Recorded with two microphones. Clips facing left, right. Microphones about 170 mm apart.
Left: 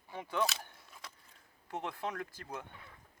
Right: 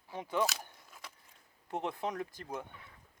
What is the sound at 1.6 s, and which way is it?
Speech, 20° right (ahead or behind).